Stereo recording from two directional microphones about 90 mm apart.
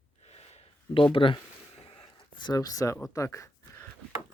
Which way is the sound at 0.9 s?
70° left (ahead or behind).